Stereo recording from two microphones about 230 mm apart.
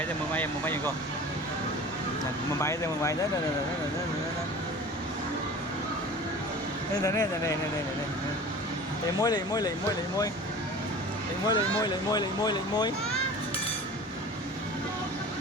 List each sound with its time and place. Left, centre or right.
0.3 s speech: centre
2.6 s speech: centre
7.0 s speech: centre
9.2 s speech: centre
11.4 s speech: centre